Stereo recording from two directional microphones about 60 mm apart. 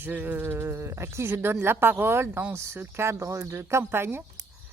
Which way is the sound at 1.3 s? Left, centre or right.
Right.